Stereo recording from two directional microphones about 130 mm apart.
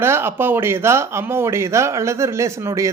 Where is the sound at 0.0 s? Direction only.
15° right (ahead or behind).